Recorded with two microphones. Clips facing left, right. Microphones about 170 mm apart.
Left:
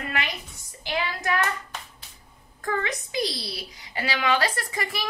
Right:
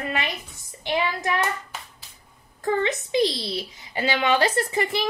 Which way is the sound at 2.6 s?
25° right (ahead or behind).